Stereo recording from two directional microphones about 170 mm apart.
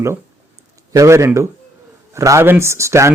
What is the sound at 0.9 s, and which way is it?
A man's voice, 15° right (ahead or behind).